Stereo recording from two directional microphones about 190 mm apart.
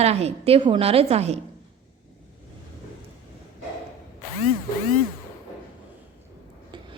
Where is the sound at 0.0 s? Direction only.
35° right (ahead or behind).